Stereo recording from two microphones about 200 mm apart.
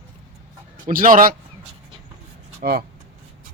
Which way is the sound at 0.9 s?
40° right (ahead or behind).